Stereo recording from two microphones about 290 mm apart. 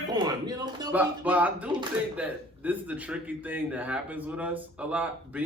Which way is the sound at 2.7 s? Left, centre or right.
Centre.